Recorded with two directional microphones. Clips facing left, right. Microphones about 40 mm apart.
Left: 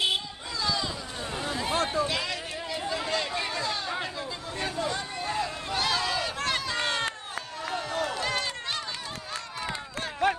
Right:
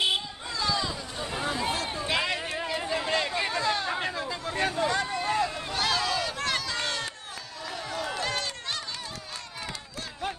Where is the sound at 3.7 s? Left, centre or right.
Right.